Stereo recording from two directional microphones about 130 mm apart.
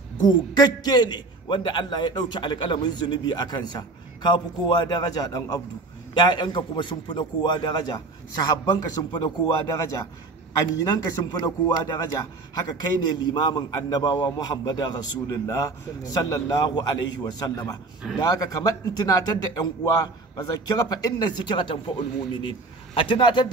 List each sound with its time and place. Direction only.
0.2 s a man's voice: 35° left (ahead or behind)
10.8 s a man's voice: 30° left (ahead or behind)